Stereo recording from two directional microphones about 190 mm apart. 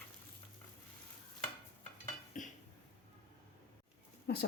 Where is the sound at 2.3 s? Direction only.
45° left (ahead or behind).